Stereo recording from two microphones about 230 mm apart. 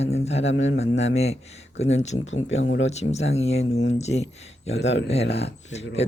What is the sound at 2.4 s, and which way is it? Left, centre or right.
Speech, left.